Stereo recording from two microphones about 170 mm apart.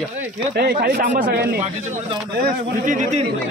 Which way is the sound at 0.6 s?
60° right (ahead or behind).